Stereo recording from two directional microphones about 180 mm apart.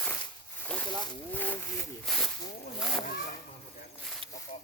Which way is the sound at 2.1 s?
Centre (ahead or behind).